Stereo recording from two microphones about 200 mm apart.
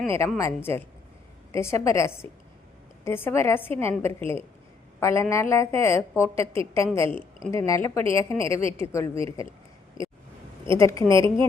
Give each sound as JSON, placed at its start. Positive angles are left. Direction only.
{"t": 0.3, "sound": "a woman's voice", "side_deg": 15}
{"t": 10.7, "sound": "a woman's voice", "side_deg": 15}